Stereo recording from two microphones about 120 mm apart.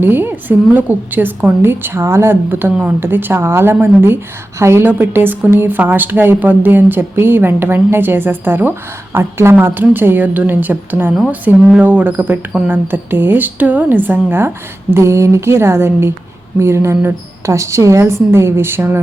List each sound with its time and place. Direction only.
0.0 s a woman's voice: 15° right (ahead or behind)